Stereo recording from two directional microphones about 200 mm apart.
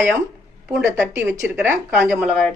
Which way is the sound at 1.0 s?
10° right (ahead or behind).